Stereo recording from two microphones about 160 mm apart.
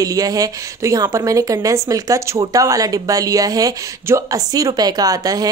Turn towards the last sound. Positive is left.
turn(degrees=-25)  # may be behind; listen again after turning